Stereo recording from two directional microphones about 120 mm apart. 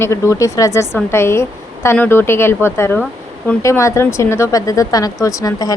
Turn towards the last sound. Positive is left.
turn(degrees=30)  # may be behind; listen again after turning